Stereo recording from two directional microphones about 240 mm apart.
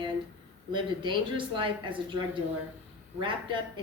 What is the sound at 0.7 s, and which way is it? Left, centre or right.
Speech, centre.